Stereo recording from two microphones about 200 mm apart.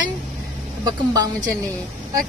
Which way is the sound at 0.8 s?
20° right (ahead or behind).